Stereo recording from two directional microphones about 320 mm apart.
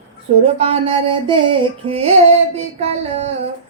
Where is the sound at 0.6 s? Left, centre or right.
Centre.